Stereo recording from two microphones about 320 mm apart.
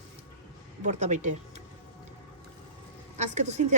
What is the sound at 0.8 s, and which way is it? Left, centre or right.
Speech, right.